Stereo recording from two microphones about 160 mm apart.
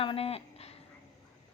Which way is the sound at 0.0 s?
35° left (ahead or behind).